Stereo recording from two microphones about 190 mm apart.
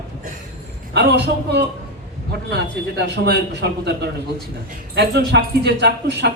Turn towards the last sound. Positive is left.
turn(degrees=-60)  # may be behind; listen again after turning